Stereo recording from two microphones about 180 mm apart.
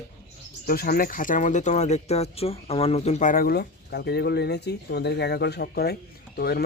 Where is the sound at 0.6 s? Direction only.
55° left (ahead or behind).